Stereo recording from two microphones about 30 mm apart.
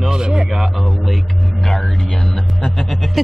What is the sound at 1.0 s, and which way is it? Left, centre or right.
Speech, centre.